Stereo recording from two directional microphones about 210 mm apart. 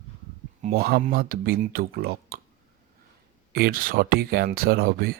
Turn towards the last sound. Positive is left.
turn(degrees=-45)  # may be behind; listen again after turning